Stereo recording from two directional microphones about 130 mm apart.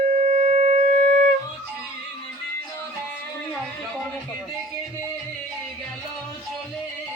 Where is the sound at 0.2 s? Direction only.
60° right (ahead or behind).